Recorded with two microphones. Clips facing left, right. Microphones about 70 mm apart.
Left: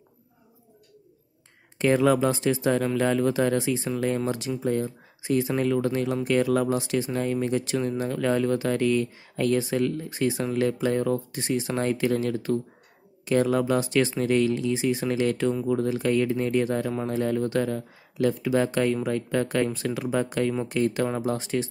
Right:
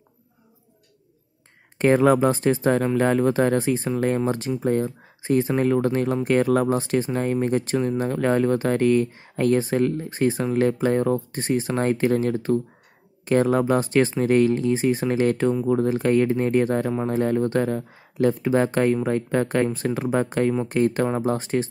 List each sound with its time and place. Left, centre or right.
1.8 s speech: right